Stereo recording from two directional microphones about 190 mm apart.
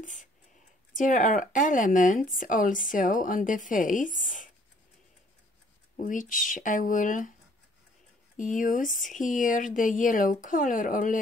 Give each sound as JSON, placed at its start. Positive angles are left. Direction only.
{"t": 0.0, "sound": "speech", "side_deg": 40}
{"t": 5.9, "sound": "speech", "side_deg": 45}
{"t": 8.4, "sound": "speech", "side_deg": 45}